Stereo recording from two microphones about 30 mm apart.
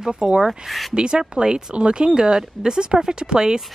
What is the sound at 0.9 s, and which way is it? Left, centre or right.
A woman's voice, right.